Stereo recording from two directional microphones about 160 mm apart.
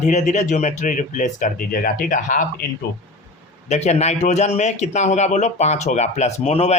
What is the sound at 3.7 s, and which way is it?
Speech, 45° left (ahead or behind).